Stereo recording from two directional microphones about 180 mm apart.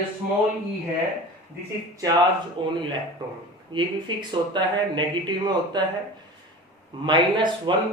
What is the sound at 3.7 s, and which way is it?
Speech, 25° right (ahead or behind).